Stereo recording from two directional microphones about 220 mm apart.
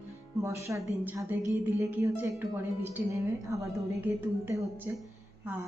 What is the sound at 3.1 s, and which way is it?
A woman's voice, 15° right (ahead or behind).